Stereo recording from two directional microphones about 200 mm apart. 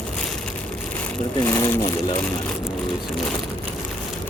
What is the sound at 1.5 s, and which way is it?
Speech, 15° left (ahead or behind).